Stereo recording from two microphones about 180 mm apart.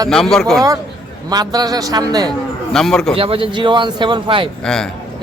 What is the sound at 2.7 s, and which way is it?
Speech, 5° left (ahead or behind).